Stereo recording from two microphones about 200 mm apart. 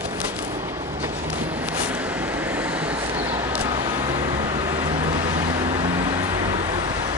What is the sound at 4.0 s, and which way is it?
Vehicle, 30° right (ahead or behind).